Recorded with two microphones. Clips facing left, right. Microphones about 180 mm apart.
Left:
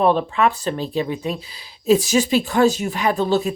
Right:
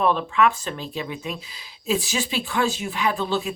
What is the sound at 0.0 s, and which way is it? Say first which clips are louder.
Speech: left 3 dB; 35° left (ahead or behind).